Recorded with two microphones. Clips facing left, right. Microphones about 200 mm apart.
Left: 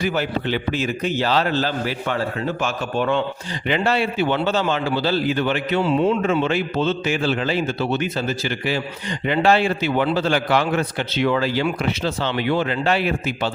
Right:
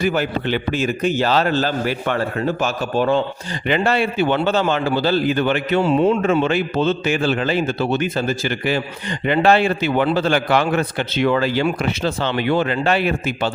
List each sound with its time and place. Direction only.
0.0 s a man's voice: 50° right (ahead or behind)
2.6 s a man's voice: 40° right (ahead or behind)
3.7 s a man's voice: 55° right (ahead or behind)